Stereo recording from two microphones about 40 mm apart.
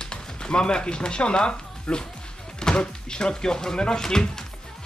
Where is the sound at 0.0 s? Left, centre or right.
Left.